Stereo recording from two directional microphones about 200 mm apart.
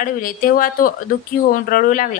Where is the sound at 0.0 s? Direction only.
45° left (ahead or behind).